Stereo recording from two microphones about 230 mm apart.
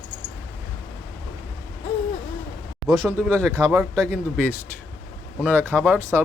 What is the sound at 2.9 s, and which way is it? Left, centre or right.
Speech, centre.